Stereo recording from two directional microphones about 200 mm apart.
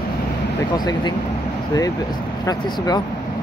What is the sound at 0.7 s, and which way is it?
Speech, 20° left (ahead or behind).